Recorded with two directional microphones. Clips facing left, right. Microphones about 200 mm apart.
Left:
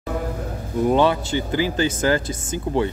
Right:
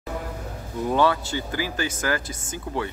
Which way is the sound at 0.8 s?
20° left (ahead or behind).